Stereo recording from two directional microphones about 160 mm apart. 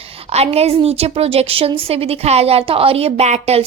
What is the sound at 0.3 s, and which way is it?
Speech, 40° right (ahead or behind).